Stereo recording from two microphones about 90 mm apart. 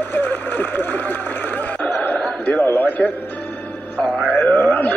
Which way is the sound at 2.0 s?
20° left (ahead or behind).